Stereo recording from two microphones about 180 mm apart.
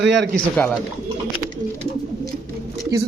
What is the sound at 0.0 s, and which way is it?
Speech, 80° right.